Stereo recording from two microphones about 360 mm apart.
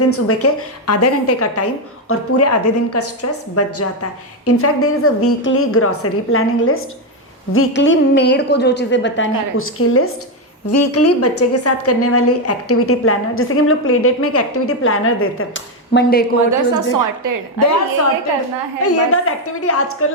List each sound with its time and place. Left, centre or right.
0.0 s a woman's voice: left
16.9 s a woman's voice: right
17.6 s a woman's voice: left